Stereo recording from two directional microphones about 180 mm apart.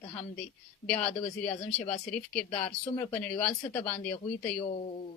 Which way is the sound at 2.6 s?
10° left (ahead or behind).